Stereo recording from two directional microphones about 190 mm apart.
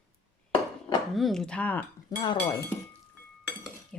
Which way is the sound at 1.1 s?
Centre (ahead or behind).